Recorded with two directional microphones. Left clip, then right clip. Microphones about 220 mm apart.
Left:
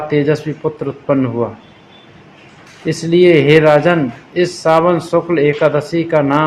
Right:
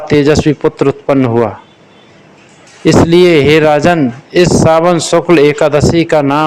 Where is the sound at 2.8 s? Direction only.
50° right (ahead or behind).